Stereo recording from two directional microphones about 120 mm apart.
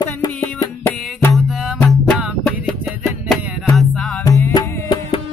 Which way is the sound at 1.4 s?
Centre (ahead or behind).